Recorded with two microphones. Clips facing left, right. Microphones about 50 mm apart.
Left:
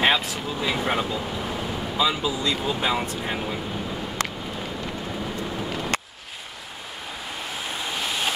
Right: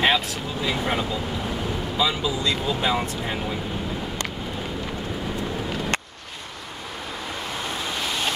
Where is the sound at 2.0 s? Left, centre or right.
Centre.